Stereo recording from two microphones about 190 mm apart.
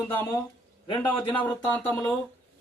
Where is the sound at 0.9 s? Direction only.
25° left (ahead or behind).